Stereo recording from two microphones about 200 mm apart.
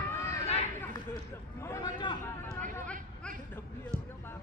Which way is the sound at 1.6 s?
15° left (ahead or behind).